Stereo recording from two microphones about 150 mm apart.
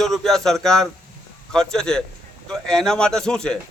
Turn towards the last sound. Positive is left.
turn(degrees=5)  # may be behind; listen again after turning